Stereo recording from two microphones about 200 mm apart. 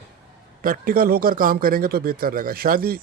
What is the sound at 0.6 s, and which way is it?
A man's voice, 45° right (ahead or behind).